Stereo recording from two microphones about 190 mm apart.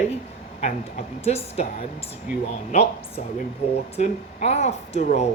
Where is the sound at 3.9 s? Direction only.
35° left (ahead or behind).